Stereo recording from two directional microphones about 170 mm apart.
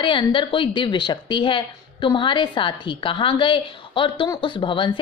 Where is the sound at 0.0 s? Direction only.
30° left (ahead or behind).